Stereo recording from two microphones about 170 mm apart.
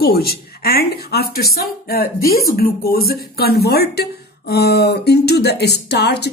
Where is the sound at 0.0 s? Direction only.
65° left (ahead or behind).